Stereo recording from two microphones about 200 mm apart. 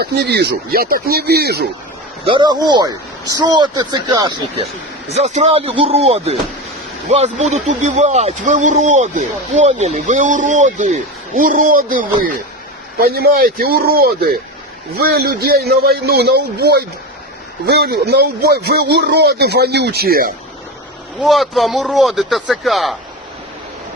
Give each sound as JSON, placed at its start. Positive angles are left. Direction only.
{"t": 0.0, "sound": "speech", "side_deg": -55}
{"t": 2.2, "sound": "speech", "side_deg": -25}
{"t": 4.5, "sound": "a man's voice", "side_deg": -30}
{"t": 21.2, "sound": "speech", "side_deg": 0}